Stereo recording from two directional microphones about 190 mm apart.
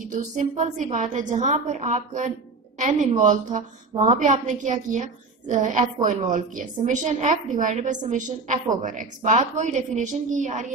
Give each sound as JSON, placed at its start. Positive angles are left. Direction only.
{"t": 0.1, "sound": "a woman's voice", "side_deg": -40}